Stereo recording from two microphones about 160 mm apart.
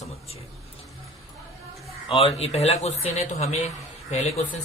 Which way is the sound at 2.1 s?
35° left (ahead or behind).